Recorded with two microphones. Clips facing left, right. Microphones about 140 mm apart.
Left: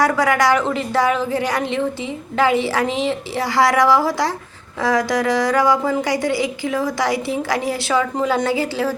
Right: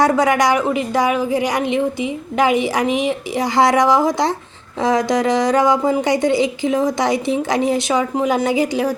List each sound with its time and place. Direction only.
0.0 s a woman's voice: 20° right (ahead or behind)